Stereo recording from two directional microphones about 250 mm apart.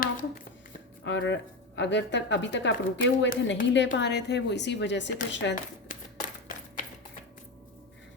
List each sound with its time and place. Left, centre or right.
0.0 s a sound: left
1.0 s speech: left
5.9 s typewriter: left